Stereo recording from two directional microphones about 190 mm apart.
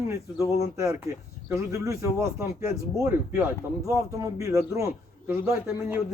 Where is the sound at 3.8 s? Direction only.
15° right (ahead or behind).